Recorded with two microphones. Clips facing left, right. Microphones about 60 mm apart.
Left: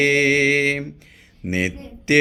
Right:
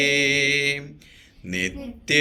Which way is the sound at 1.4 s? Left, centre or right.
Left.